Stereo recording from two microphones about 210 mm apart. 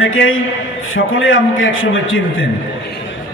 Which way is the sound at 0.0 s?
70° left (ahead or behind).